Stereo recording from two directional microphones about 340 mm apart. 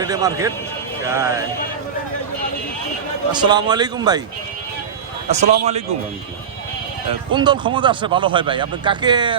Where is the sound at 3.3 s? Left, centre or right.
Centre.